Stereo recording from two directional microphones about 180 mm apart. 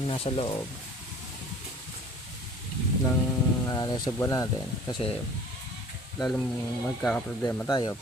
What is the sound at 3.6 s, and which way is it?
Speech, 20° left (ahead or behind).